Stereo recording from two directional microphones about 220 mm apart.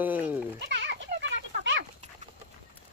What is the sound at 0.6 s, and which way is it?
Goat, 50° right (ahead or behind).